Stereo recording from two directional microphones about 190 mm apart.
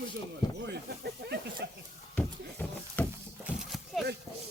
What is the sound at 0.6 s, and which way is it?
Speech, 60° right (ahead or behind).